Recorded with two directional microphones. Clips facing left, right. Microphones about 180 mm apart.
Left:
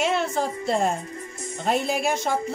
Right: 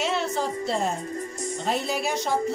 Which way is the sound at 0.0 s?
55° left (ahead or behind).